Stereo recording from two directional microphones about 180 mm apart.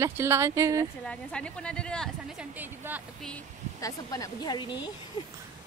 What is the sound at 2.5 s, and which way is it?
Speech, 10° right (ahead or behind).